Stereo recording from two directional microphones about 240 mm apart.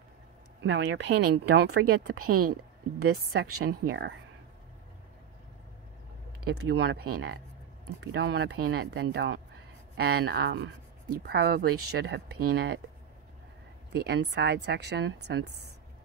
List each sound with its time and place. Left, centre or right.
0.6 s speech: right
3.4 s speech: right
3.8 s speech: right
6.4 s speech: right
13.9 s speech: right